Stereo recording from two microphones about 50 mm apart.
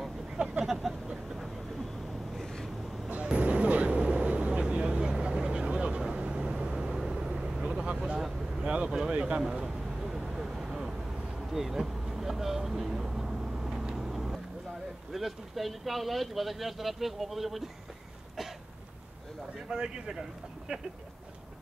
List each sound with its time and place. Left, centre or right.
0.4 s a sound: right
0.8 s vehicle: centre
2.3 s vehicle: centre
3.1 s vehicle: right; by 7.6 s centre
8.6 s vehicle: right
9.2 s a sound: centre
11.5 s vehicle: centre
15.1 s speech: centre
19.7 s speech: centre